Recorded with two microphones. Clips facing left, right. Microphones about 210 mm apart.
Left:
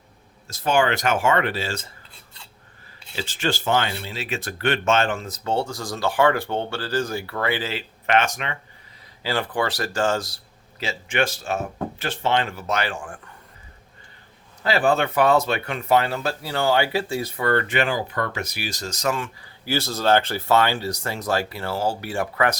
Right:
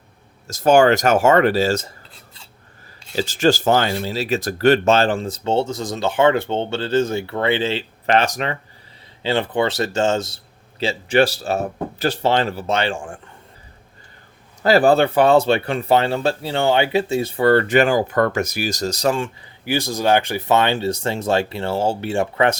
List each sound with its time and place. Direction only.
0.4 s speech: 45° right (ahead or behind)
3.1 s speech: 40° right (ahead or behind)
9.2 s speech: 25° right (ahead or behind)
14.6 s speech: 40° right (ahead or behind)
19.6 s speech: 15° right (ahead or behind)